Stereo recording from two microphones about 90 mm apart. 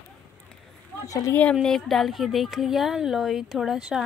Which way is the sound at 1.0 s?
40° left (ahead or behind).